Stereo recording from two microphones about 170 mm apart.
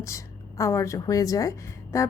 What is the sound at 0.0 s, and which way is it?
A woman's voice, 20° left (ahead or behind).